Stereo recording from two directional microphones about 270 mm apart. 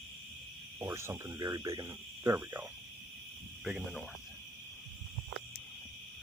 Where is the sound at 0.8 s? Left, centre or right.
Centre.